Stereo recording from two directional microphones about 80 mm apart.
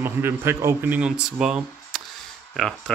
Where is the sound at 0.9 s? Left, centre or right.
Centre.